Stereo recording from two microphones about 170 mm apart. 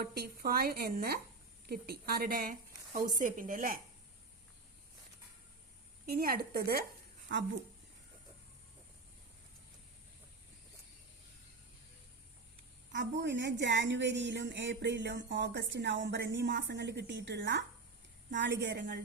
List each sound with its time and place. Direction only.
0.0 s a woman's voice: 65° right (ahead or behind)
6.1 s speech: 65° right (ahead or behind)
7.3 s a woman's voice: 90° right
12.9 s a woman's voice: 90° right